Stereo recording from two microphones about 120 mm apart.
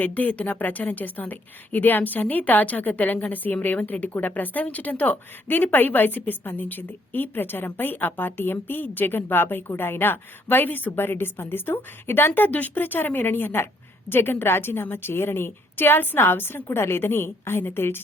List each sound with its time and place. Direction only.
0.0 s a woman's voice: 15° left (ahead or behind)